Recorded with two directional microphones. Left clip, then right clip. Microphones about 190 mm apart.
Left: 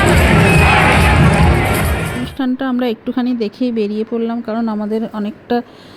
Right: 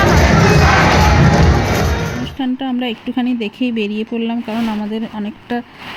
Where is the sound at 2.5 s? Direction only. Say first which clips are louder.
Left 3 dB; 25° left (ahead or behind).